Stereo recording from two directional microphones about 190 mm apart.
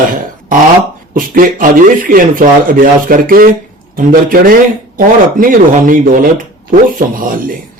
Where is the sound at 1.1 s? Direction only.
45° right (ahead or behind).